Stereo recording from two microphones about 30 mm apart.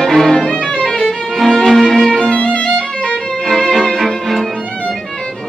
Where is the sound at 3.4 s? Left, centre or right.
Centre.